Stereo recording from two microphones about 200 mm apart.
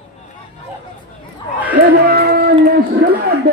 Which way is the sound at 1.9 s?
50° right (ahead or behind).